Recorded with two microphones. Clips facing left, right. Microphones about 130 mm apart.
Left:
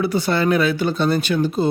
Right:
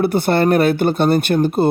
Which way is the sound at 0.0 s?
55° right (ahead or behind).